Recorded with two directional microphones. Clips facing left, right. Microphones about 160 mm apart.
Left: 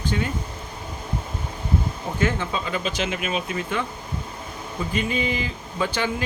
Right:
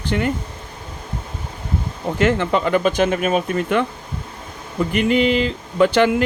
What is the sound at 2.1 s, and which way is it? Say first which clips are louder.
Speech: right 8 dB; 80° right.